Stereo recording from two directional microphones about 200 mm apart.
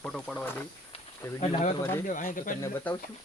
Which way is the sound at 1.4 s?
35° left (ahead or behind).